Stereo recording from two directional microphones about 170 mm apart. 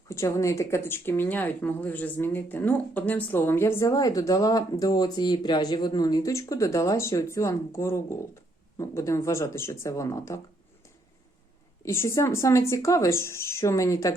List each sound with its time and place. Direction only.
0.1 s speech: 15° left (ahead or behind)
11.9 s speech: 15° left (ahead or behind)